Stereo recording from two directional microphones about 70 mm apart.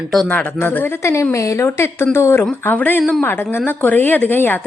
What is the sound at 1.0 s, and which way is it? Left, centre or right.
Speech, left.